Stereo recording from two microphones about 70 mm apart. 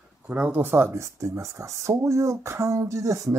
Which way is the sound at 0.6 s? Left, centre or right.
Right.